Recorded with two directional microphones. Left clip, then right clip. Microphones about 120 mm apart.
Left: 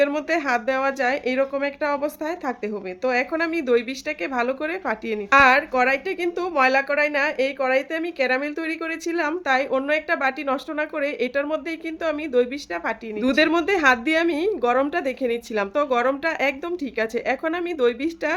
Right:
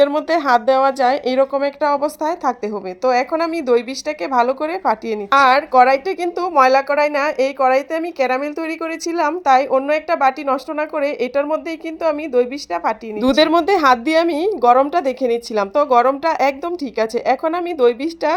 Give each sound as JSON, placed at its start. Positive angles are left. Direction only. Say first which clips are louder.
{"t": 0.0, "sound": "a woman's voice", "louder": "right 6 dB", "side_deg": -35}
{"t": 3.1, "sound": "a woman's voice", "louder": "right 6 dB", "side_deg": -25}